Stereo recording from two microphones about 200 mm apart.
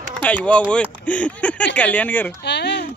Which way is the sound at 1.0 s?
5° left (ahead or behind).